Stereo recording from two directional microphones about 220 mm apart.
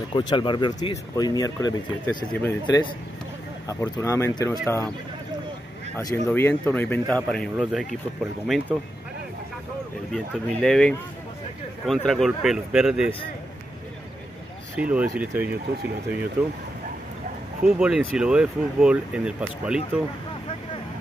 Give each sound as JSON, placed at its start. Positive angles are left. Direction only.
{"t": 0.1, "sound": "speech", "side_deg": 20}
{"t": 5.9, "sound": "speech", "side_deg": 10}
{"t": 10.1, "sound": "speech", "side_deg": 0}
{"t": 14.8, "sound": "speech", "side_deg": -5}
{"t": 17.6, "sound": "speech", "side_deg": -5}